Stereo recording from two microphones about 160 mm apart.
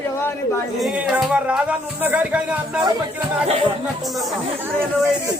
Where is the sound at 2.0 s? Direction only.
10° right (ahead or behind).